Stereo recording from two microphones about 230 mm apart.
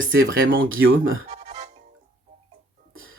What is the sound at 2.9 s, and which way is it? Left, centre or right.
Music, right.